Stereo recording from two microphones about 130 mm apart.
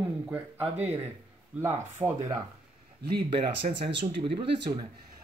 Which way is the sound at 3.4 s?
40° right (ahead or behind).